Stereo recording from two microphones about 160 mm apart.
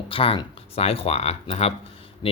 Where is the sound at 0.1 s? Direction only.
35° left (ahead or behind).